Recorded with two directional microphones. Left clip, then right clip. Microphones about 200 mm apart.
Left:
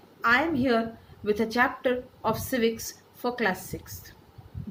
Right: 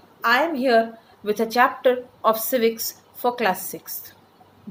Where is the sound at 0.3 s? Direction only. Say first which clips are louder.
Right 5 dB; 15° left (ahead or behind).